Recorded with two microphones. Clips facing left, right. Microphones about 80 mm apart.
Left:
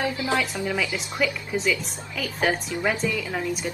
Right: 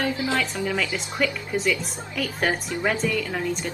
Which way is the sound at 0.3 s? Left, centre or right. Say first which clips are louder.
Even; centre.